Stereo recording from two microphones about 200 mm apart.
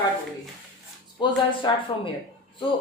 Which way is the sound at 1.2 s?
25° left (ahead or behind).